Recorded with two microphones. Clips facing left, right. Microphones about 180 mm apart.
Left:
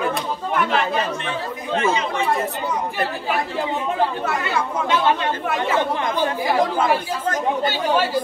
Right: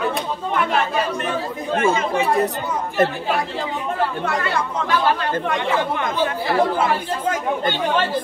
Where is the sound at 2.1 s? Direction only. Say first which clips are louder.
Right 3 dB; 35° right (ahead or behind).